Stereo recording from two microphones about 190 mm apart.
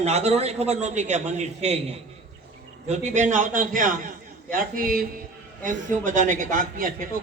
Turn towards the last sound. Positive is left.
turn(degrees=-45)  # may be behind; listen again after turning